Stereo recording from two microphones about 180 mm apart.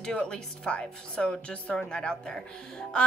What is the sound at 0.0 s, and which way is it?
A woman's voice, 5° left (ahead or behind).